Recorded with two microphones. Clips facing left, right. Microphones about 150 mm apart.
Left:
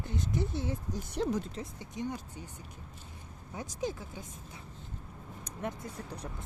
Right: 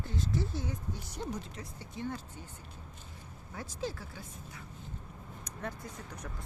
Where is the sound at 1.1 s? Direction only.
90° left.